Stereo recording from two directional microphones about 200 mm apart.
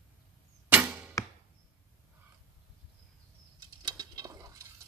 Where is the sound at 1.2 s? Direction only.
15° left (ahead or behind).